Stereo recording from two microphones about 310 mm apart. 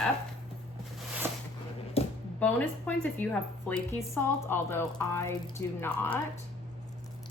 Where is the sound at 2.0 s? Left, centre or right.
Centre.